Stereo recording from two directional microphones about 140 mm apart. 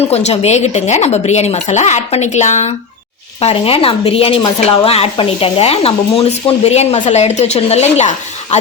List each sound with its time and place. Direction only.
0.0 s a woman's voice: 50° left (ahead or behind)
3.4 s a woman's voice: 40° left (ahead or behind)